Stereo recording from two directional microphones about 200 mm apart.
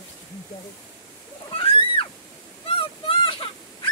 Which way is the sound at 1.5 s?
25° left (ahead or behind).